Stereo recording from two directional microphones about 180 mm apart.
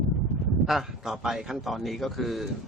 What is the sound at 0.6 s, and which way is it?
A man's voice, centre (ahead or behind).